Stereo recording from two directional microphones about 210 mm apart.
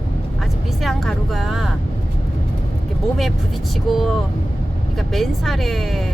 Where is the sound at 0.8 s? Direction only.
Centre (ahead or behind).